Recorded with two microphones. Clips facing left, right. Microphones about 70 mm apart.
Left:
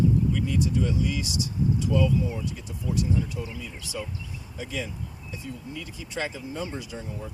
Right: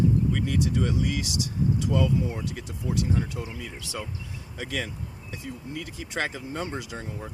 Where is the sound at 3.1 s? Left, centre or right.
Right.